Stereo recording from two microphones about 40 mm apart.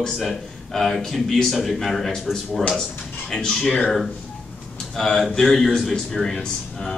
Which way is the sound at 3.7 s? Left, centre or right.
Left.